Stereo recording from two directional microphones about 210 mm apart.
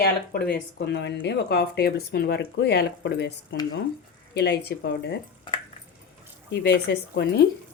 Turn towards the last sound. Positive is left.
turn(degrees=50)  # may be behind; listen again after turning